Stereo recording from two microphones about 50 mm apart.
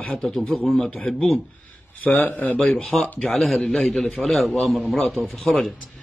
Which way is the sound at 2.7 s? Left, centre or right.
Centre.